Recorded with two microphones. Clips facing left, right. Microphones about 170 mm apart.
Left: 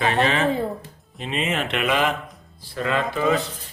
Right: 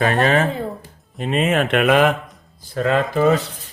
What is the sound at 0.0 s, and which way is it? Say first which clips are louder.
Speech: right 3 dB; 45° right (ahead or behind).